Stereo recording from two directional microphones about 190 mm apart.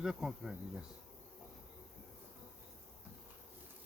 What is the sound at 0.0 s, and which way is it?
Insect, 5° right (ahead or behind).